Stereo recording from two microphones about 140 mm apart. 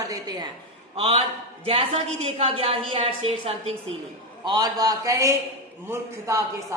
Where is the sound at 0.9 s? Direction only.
40° right (ahead or behind).